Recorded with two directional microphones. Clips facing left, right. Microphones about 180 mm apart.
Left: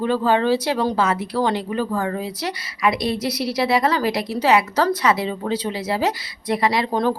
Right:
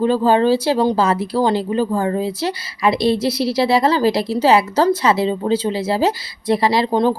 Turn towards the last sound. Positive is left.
turn(degrees=-30)  # may be behind; listen again after turning